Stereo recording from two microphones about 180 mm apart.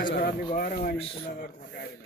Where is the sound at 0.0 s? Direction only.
55° left (ahead or behind).